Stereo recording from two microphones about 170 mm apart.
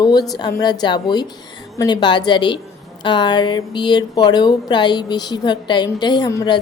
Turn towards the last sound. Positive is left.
turn(degrees=20)  # may be behind; listen again after turning